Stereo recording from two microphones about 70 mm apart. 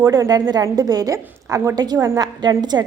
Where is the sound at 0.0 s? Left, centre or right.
Right.